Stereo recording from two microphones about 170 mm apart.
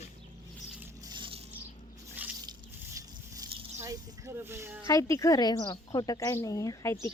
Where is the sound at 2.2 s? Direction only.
10° right (ahead or behind).